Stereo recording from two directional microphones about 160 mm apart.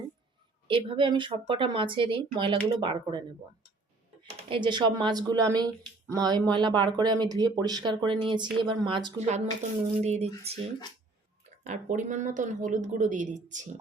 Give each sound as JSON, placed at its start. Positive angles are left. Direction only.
{"t": 0.7, "sound": "speech", "side_deg": -30}
{"t": 4.4, "sound": "speech", "side_deg": -30}
{"t": 10.0, "sound": "a woman's voice", "side_deg": -40}